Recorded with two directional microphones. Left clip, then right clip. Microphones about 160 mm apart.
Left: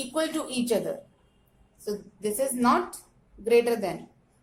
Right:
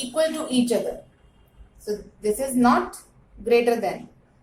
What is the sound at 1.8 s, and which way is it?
A woman's voice, 60° left (ahead or behind).